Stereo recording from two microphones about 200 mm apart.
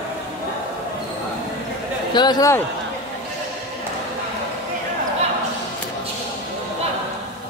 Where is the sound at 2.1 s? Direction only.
20° left (ahead or behind).